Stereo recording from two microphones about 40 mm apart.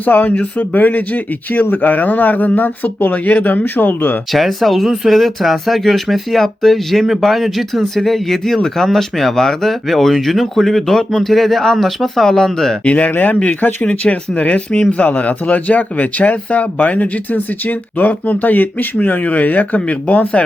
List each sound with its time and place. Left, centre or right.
0.0 s speech: left
3.6 s speech: left
4.3 s speech: centre
12.8 s speech: left
13.8 s speech: left